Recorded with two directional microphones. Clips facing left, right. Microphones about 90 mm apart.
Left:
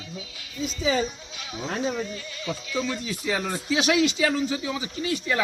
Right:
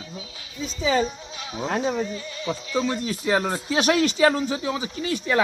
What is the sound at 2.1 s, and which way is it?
Speech, 30° right (ahead or behind).